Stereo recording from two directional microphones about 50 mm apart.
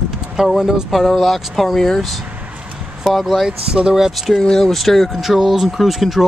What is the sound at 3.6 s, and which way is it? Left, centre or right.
Speech, centre.